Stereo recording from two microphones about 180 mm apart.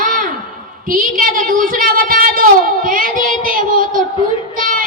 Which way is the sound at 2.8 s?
50° right (ahead or behind).